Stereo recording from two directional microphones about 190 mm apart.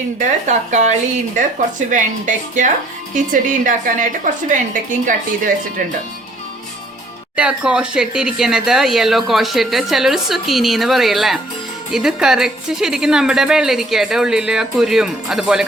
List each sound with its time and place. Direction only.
0.4 s a woman's voice: 40° right (ahead or behind)
7.3 s speech: 5° right (ahead or behind)